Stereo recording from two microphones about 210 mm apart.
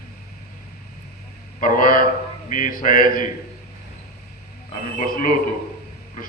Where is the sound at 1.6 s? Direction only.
40° left (ahead or behind).